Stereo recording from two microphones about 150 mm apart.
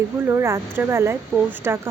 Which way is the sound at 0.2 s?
15° right (ahead or behind).